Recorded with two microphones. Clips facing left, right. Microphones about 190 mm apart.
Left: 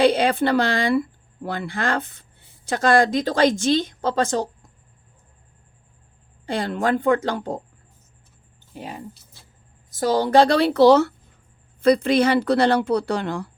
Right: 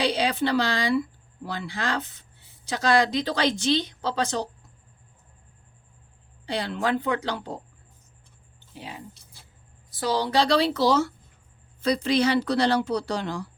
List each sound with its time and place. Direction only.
0.0 s speech: 55° left (ahead or behind)
6.4 s speech: 50° left (ahead or behind)
8.7 s speech: 45° left (ahead or behind)